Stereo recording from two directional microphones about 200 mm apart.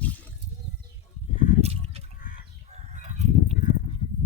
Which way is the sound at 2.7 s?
35° right (ahead or behind).